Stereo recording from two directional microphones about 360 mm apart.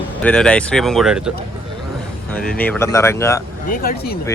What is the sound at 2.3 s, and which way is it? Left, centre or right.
Speech, centre.